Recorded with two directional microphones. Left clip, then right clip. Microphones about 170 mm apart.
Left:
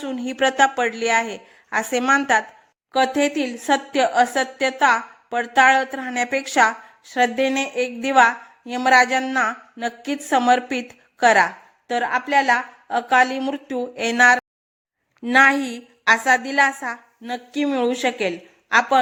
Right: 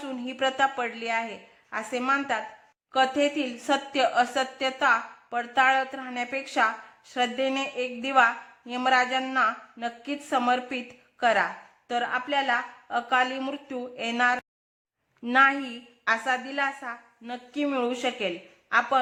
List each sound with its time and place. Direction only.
0.0 s a woman's voice: 30° left (ahead or behind)